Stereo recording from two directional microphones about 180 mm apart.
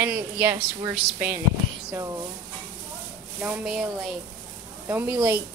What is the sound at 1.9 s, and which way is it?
Speech, 20° right (ahead or behind).